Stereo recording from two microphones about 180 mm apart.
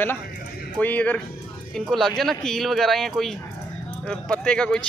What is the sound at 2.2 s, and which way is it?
Speech, centre (ahead or behind).